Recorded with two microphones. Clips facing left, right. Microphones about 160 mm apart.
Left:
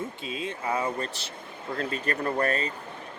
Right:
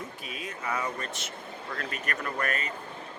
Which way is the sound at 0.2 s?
25° left (ahead or behind).